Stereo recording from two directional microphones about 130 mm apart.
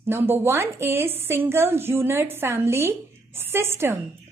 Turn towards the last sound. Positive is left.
turn(degrees=-20)  # may be behind; listen again after turning